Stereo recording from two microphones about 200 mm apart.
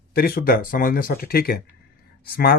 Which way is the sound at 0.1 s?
50° left (ahead or behind).